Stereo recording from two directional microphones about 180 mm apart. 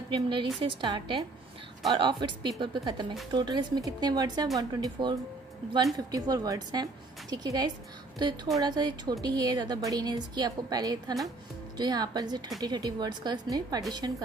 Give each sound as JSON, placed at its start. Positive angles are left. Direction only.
{"t": 0.1, "sound": "a woman's voice", "side_deg": -25}